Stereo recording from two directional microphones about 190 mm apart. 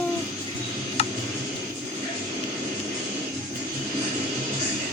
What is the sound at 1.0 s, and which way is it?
Tick, 35° left (ahead or behind).